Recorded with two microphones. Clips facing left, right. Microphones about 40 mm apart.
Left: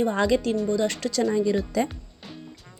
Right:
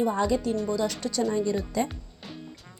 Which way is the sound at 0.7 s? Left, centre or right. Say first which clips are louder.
Left 4 dB; left.